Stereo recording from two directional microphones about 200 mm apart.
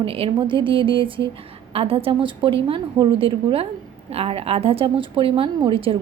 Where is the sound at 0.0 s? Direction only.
25° right (ahead or behind).